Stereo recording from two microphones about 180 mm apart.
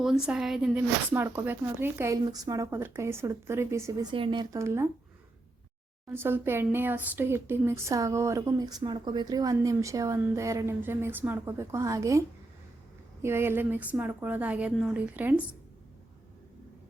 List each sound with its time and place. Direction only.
0.0 s speech: centre (ahead or behind)
4.1 s speech: 25° right (ahead or behind)
4.5 s speech: 15° right (ahead or behind)
6.1 s speech: 10° right (ahead or behind)
13.2 s speech: 15° right (ahead or behind)